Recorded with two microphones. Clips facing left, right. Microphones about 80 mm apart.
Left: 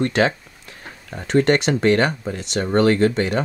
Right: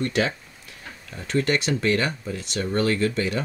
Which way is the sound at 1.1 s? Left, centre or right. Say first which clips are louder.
Left 7 dB; left.